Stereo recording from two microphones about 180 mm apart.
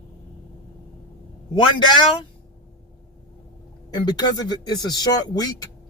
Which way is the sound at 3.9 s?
20° left (ahead or behind).